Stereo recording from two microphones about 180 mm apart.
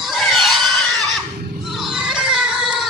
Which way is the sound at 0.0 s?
Centre (ahead or behind).